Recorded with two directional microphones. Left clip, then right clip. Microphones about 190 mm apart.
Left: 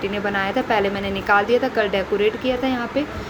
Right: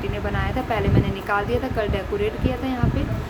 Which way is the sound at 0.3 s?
15° left (ahead or behind).